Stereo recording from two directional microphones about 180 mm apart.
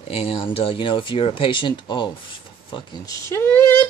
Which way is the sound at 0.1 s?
30° left (ahead or behind).